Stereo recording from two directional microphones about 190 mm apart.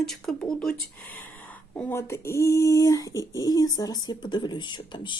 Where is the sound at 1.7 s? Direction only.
10° left (ahead or behind).